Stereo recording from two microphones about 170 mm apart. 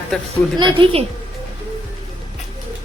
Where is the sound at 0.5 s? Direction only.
30° right (ahead or behind).